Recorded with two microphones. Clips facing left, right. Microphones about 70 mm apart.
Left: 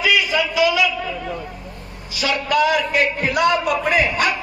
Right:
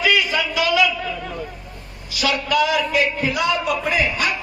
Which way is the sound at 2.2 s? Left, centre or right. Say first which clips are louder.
Left 1 dB; left.